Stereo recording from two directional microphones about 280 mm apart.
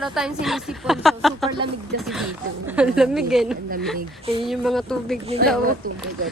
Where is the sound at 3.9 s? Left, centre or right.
Centre.